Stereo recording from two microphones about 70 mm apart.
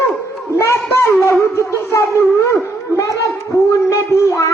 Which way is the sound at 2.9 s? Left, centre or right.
Left.